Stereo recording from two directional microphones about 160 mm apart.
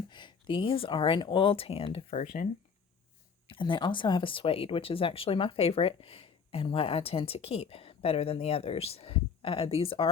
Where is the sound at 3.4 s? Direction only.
30° left (ahead or behind).